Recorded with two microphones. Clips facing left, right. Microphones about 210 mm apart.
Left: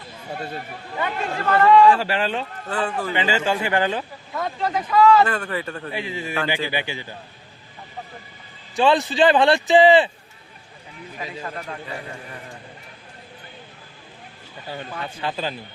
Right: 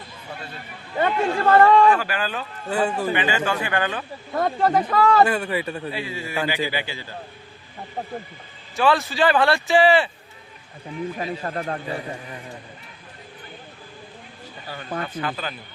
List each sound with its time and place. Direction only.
0.3 s speech: 45° left (ahead or behind)
1.0 s a man's voice: 45° right (ahead or behind)
1.9 s a man's voice: 25° left (ahead or behind)
2.6 s a man's voice: 10° right (ahead or behind)
3.1 s a man's voice: 25° left (ahead or behind)
4.3 s a man's voice: 50° right (ahead or behind)
5.2 s a man's voice: 10° right (ahead or behind)
5.9 s a man's voice: 20° left (ahead or behind)
8.7 s a man's voice: 20° left (ahead or behind)
11.2 s a man's voice: 45° right (ahead or behind)
15.2 s a man's voice: 30° left (ahead or behind)